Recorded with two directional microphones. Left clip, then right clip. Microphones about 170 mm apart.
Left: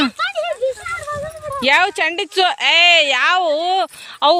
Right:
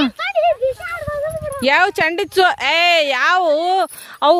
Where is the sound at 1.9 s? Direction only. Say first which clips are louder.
Right 2 dB; 50° right (ahead or behind).